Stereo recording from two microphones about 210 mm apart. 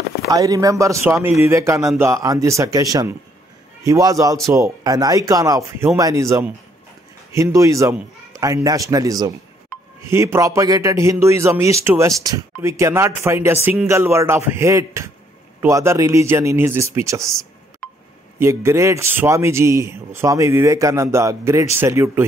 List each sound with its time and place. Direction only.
0.3 s speech: 15° right (ahead or behind)
9.7 s music: 5° left (ahead or behind)
10.0 s speech: 15° right (ahead or behind)
17.8 s a sound: 5° left (ahead or behind)
18.4 s speech: 10° right (ahead or behind)